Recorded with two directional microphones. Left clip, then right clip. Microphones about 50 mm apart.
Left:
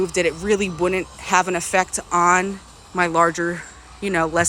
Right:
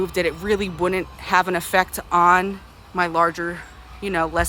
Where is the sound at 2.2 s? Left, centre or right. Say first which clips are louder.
Right 1 dB; centre.